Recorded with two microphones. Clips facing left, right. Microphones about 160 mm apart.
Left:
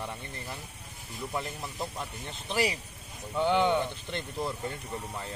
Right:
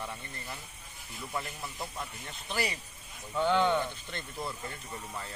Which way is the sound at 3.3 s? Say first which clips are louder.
Left 1 dB; 15° left (ahead or behind).